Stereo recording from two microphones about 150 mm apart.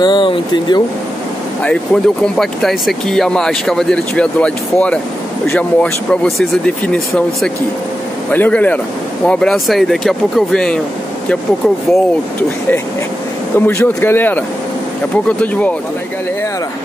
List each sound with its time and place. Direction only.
0.0 s speech: 30° left (ahead or behind)
2.2 s speech: 5° left (ahead or behind)